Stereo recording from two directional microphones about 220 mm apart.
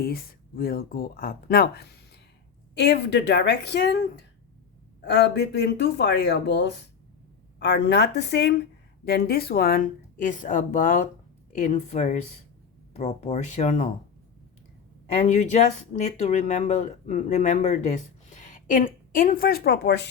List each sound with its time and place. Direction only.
0.0 s speech: 45° left (ahead or behind)
15.1 s speech: 30° left (ahead or behind); by 20.1 s 50° left (ahead or behind)